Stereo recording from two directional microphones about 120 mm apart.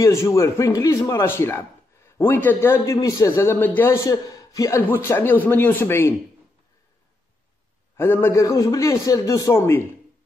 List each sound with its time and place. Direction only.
0.0 s a man's voice: 25° left (ahead or behind)
2.9 s a man's voice: 25° left (ahead or behind)
8.0 s a man's voice: 20° left (ahead or behind)